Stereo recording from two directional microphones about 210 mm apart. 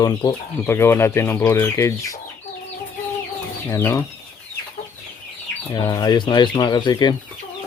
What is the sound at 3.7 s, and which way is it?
Speech, 10° left (ahead or behind).